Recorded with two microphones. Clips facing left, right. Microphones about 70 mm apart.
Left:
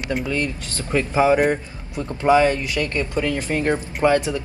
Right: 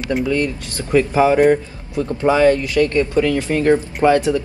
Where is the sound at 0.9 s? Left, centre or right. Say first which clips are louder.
Right 4 dB; centre.